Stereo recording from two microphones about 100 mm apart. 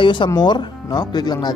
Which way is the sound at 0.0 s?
55° left (ahead or behind).